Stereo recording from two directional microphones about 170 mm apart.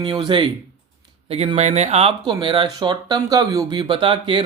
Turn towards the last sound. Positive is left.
turn(degrees=-30)  # may be behind; listen again after turning